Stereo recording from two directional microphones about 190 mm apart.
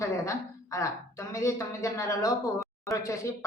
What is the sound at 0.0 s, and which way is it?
A woman's voice, 15° left (ahead or behind).